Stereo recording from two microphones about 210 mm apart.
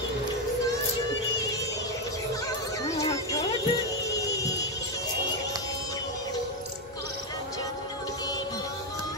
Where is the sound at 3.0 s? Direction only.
15° left (ahead or behind).